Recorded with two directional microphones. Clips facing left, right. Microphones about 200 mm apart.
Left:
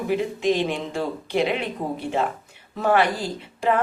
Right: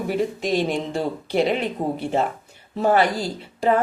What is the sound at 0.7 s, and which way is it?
Speech, 35° right (ahead or behind).